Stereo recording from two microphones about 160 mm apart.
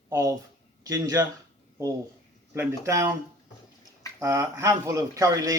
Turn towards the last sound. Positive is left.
turn(degrees=-20)  # may be behind; listen again after turning